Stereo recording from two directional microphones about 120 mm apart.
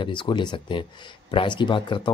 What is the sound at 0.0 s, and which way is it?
Speech, 40° left (ahead or behind).